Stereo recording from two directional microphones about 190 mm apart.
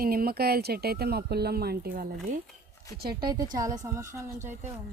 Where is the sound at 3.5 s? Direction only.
20° right (ahead or behind).